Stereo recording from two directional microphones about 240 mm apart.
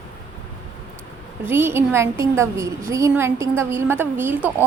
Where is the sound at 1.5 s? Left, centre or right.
Centre.